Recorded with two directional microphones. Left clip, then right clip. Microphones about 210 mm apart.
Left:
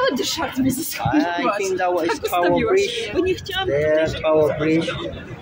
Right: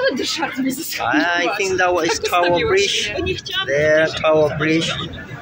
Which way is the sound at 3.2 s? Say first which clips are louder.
Left 1 dB; 60° left (ahead or behind).